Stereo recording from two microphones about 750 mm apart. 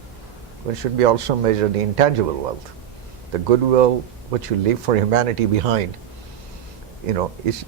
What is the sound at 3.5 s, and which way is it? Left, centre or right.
A man's voice, right.